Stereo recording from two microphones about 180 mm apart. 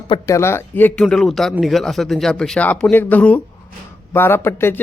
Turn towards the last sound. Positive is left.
turn(degrees=15)  # may be behind; listen again after turning